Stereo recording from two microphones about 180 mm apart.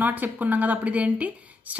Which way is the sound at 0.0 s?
10° right (ahead or behind).